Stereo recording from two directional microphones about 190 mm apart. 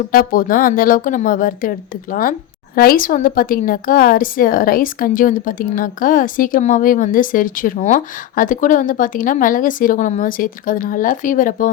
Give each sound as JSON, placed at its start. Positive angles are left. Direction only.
{"t": 0.1, "sound": "a woman's voice", "side_deg": 50}